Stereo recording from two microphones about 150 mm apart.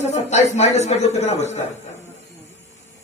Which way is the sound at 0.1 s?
50° left (ahead or behind).